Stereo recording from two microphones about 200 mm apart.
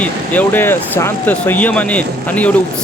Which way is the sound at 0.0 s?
10° left (ahead or behind).